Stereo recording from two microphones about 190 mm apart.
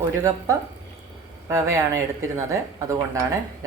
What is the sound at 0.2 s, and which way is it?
Speech, 15° right (ahead or behind).